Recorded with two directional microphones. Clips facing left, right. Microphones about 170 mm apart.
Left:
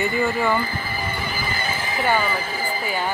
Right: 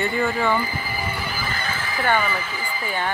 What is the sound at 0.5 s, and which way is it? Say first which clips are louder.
Neigh: even; 10° right (ahead or behind).